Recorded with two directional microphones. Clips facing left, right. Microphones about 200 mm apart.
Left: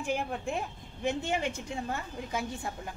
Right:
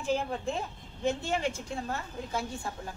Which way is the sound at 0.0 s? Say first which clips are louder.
Right 2 dB; 15° left (ahead or behind).